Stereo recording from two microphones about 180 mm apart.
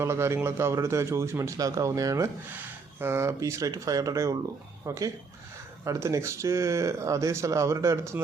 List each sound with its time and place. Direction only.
0.0 s speech: 15° right (ahead or behind)